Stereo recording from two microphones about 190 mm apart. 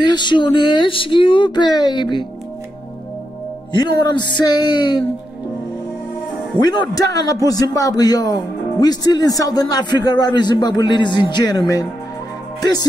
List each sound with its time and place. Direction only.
0.0 s speech: 25° left (ahead or behind)
3.7 s speech: 25° left (ahead or behind)
6.6 s speech: 20° left (ahead or behind)